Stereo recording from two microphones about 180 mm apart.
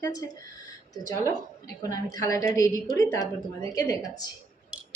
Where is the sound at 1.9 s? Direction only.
20° left (ahead or behind).